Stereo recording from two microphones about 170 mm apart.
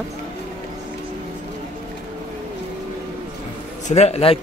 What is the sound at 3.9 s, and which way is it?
Speech, 40° left (ahead or behind).